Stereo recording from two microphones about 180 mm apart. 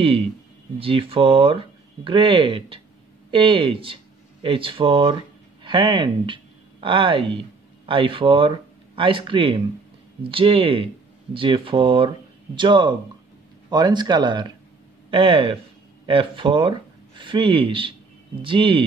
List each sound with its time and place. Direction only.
0.7 s speech: 30° right (ahead or behind)